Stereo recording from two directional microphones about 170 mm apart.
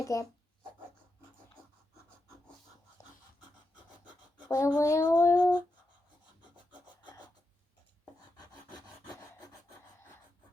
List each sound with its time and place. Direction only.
0.0 s speech: 20° left (ahead or behind)
4.4 s speech: 20° left (ahead or behind)
6.4 s filing: 25° left (ahead or behind)